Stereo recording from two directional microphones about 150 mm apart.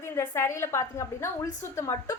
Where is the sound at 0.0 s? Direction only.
15° left (ahead or behind).